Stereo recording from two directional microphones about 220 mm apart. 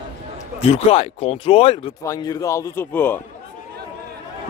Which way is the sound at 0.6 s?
25° left (ahead or behind).